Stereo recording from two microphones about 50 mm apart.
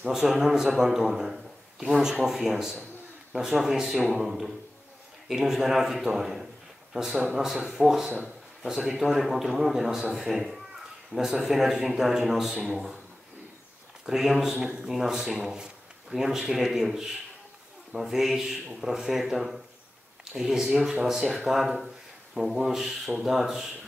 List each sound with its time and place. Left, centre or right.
0.1 s a man's voice: centre
14.0 s a man's voice: centre